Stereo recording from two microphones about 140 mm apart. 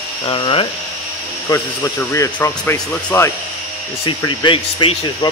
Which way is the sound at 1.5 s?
20° left (ahead or behind).